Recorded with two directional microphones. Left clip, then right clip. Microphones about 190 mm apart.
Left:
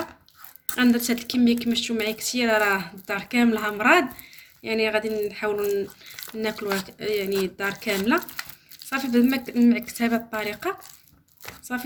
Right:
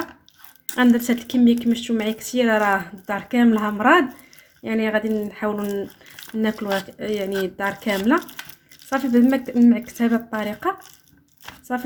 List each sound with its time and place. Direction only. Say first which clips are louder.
0.8 s speech: right 3 dB; 35° right (ahead or behind)